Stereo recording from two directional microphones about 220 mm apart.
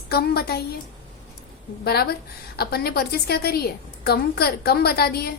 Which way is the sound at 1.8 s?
45° left (ahead or behind).